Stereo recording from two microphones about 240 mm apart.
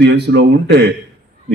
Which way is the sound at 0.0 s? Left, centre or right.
Right.